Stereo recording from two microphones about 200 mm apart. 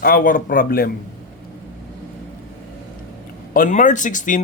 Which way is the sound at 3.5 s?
40° left (ahead or behind).